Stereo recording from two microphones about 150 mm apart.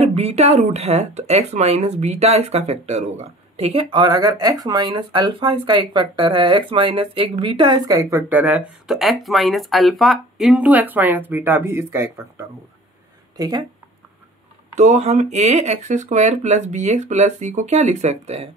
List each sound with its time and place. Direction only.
0.0 s speech: 45° right (ahead or behind); by 12.4 s 15° right (ahead or behind)
13.4 s speech: 25° right (ahead or behind)
14.8 s speech: 50° right (ahead or behind)